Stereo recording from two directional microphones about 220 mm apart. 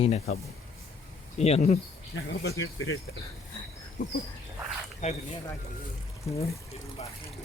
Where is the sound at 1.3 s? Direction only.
30° left (ahead or behind).